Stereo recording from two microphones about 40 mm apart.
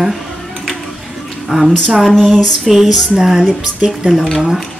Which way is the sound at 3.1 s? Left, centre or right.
Centre.